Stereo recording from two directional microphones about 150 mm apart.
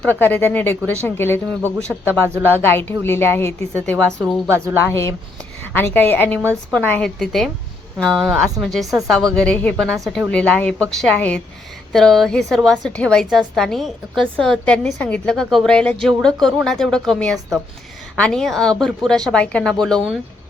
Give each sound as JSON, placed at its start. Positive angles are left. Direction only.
{"t": 0.0, "sound": "speech", "side_deg": 10}
{"t": 1.9, "sound": "speech", "side_deg": -15}
{"t": 2.5, "sound": "speech", "side_deg": 15}
{"t": 4.5, "sound": "a woman's voice", "side_deg": -20}
{"t": 4.9, "sound": "a woman's voice", "side_deg": 20}